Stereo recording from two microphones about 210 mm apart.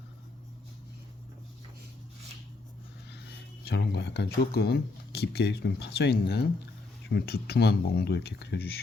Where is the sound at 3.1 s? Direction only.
55° left (ahead or behind).